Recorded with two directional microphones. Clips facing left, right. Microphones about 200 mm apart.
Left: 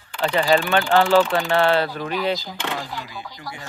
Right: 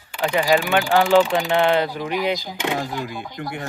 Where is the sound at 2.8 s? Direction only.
45° right (ahead or behind).